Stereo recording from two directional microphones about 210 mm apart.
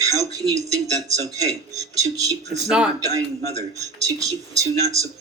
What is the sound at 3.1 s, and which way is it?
Speech, 15° right (ahead or behind).